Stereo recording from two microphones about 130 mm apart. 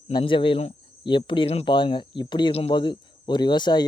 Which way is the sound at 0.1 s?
40° left (ahead or behind).